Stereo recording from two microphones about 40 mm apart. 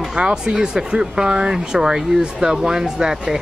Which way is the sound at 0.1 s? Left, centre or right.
Right.